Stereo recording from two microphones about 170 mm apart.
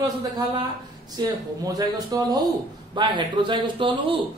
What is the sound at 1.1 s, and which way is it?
Speech, 20° right (ahead or behind).